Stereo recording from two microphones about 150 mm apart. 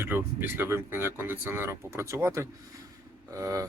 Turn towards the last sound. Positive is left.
turn(degrees=-20)  # may be behind; listen again after turning